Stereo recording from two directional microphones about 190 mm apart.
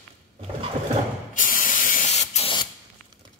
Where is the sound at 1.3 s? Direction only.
45° left (ahead or behind).